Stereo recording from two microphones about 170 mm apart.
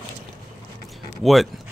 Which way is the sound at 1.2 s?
Centre (ahead or behind).